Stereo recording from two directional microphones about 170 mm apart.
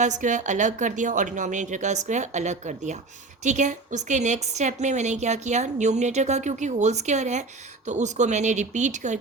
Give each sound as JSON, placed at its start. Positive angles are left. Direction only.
{"t": 0.0, "sound": "a woman's voice", "side_deg": -45}